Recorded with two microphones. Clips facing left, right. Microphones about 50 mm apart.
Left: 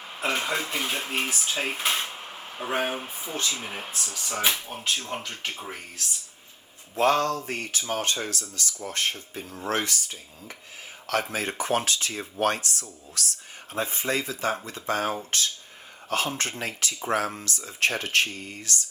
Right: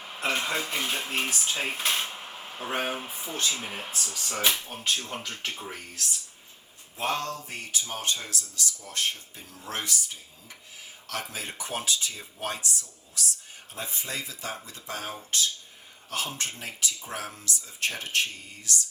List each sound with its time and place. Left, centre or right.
0.2 s speech: centre
1.7 s a sound: centre
2.6 s speech: centre
6.9 s speech: left
13.7 s speech: left